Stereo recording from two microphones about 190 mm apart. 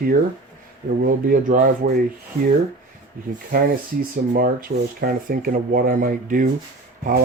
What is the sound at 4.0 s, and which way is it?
Speech, 50° right (ahead or behind).